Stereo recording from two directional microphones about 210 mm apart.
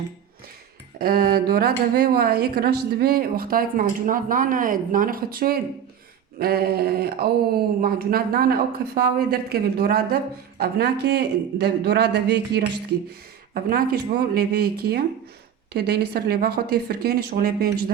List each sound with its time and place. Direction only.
0.9 s a woman's voice: 45° right (ahead or behind)